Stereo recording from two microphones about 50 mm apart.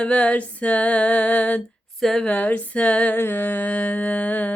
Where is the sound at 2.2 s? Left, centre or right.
Left.